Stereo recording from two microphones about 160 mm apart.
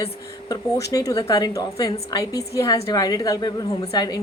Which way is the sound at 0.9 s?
25° left (ahead or behind).